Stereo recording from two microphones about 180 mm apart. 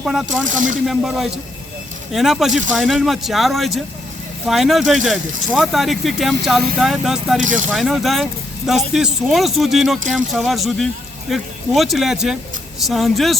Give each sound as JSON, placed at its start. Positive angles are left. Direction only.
{"t": 0.0, "sound": "speech", "side_deg": 0}
{"t": 0.4, "sound": "speech", "side_deg": -45}
{"t": 0.9, "sound": "speech", "side_deg": 0}
{"t": 7.3, "sound": "speech", "side_deg": -45}
{"t": 7.7, "sound": "speech", "side_deg": 0}